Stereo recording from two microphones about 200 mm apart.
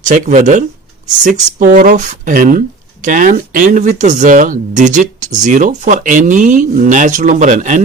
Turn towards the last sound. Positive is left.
turn(degrees=-40)  # may be behind; listen again after turning